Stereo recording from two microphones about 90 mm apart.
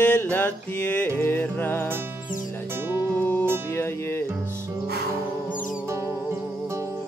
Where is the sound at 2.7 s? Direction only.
25° right (ahead or behind).